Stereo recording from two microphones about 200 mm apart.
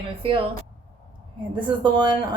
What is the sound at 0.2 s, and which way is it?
Speech, 25° right (ahead or behind).